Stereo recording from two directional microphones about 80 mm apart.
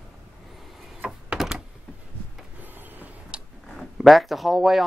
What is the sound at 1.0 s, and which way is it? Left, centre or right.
Door, centre.